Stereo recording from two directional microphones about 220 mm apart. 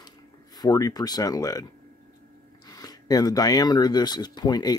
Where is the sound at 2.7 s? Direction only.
15° left (ahead or behind).